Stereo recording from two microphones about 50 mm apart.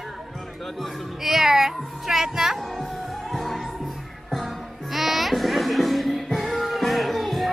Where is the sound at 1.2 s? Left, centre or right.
Centre.